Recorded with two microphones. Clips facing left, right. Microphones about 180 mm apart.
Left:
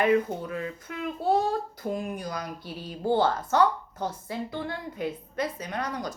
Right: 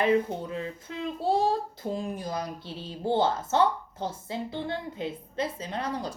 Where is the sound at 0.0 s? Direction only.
25° right (ahead or behind).